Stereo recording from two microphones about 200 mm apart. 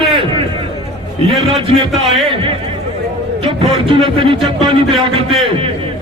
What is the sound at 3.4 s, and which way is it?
Speech, 25° right (ahead or behind).